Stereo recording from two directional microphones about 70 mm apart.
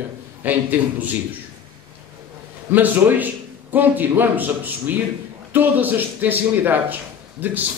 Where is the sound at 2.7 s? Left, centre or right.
Right.